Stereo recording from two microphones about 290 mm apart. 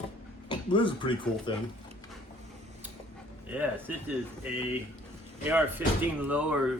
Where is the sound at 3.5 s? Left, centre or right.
Centre.